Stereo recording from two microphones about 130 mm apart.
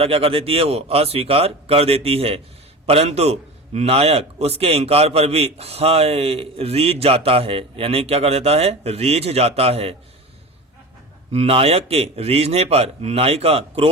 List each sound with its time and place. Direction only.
0.0 s a man's voice: 50° right (ahead or behind)
11.3 s a man's voice: 50° right (ahead or behind)